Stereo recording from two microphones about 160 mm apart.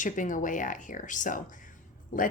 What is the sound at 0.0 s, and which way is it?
A woman's voice, 55° left (ahead or behind).